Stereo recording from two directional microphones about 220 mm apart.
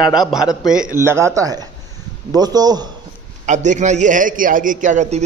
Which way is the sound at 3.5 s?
35° right (ahead or behind).